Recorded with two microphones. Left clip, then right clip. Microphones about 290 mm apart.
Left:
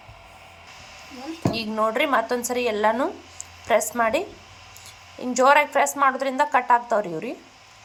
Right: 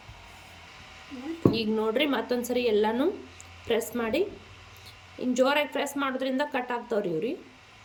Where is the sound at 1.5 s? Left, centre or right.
Centre.